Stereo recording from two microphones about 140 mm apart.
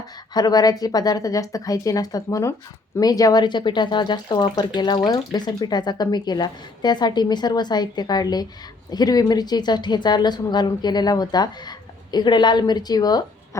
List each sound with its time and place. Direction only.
0.3 s a woman's voice: 25° left (ahead or behind)